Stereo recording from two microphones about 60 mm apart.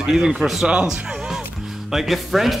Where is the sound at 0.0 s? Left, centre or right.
Centre.